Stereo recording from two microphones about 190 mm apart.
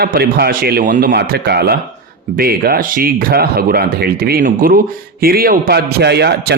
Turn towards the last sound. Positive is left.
turn(degrees=-60)  # may be behind; listen again after turning